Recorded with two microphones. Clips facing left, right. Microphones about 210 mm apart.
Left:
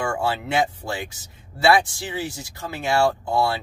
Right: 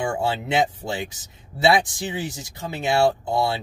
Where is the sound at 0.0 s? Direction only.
20° right (ahead or behind).